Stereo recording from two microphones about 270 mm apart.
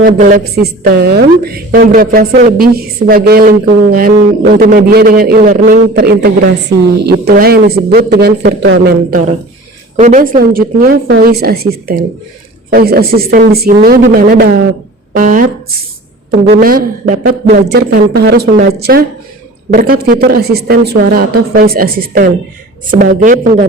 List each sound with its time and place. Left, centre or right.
0.0 s a woman's voice: right
16.6 s a woman's voice: right